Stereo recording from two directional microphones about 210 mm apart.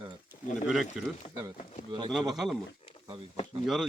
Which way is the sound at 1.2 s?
30° left (ahead or behind).